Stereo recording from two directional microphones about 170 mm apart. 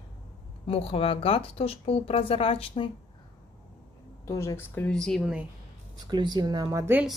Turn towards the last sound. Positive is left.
turn(degrees=-15)  # may be behind; listen again after turning